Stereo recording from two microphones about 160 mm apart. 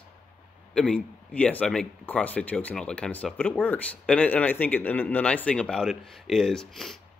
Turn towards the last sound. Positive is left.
turn(degrees=0)  # may be behind; listen again after turning